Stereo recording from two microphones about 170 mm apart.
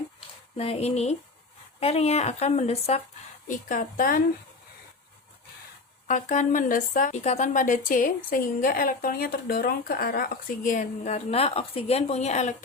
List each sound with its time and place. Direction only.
0.5 s speech: 35° left (ahead or behind)
3.5 s a woman's voice: 50° left (ahead or behind)
6.1 s a woman's voice: 50° left (ahead or behind)